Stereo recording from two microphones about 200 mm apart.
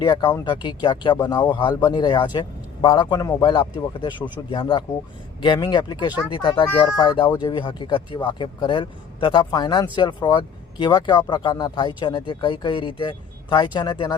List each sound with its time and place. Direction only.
0.0 s speech: 20° left (ahead or behind)